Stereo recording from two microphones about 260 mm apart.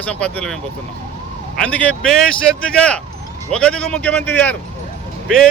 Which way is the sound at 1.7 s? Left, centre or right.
Centre.